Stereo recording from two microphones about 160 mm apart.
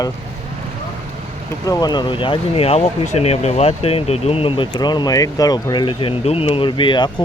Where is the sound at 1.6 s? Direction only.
25° left (ahead or behind).